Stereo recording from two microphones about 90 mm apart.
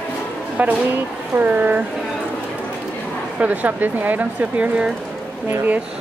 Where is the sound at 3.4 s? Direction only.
20° right (ahead or behind).